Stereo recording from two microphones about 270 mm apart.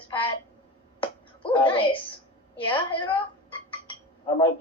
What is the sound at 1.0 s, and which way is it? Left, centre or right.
Music, centre.